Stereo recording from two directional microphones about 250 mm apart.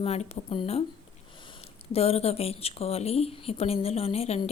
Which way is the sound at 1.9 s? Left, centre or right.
Left.